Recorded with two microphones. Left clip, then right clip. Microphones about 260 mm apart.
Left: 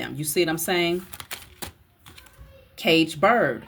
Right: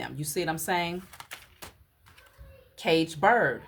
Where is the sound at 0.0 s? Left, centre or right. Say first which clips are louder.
Left 5 dB; centre.